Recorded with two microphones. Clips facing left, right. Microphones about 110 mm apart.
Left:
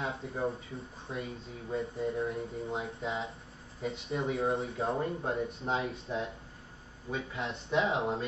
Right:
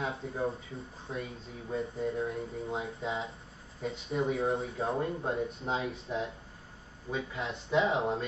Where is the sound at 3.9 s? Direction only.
30° right (ahead or behind).